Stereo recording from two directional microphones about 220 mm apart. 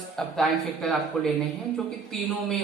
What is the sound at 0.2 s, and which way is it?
Speech, centre (ahead or behind).